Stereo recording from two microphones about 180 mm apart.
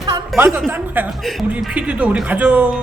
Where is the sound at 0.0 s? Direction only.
15° right (ahead or behind).